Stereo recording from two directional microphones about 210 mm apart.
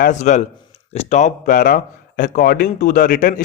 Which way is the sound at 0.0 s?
35° left (ahead or behind).